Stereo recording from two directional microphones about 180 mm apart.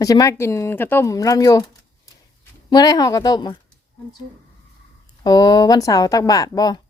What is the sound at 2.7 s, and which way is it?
Speech, 20° left (ahead or behind).